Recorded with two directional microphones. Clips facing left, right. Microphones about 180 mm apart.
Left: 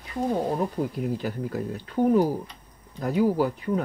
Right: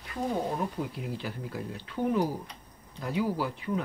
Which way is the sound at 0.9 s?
45° left (ahead or behind).